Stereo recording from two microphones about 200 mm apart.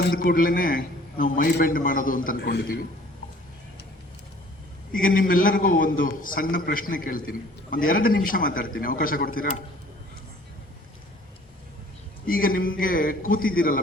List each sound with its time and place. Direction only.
0.2 s a man's voice: 45° left (ahead or behind)
4.9 s a man's voice: 45° left (ahead or behind)
12.2 s a man's voice: 45° left (ahead or behind)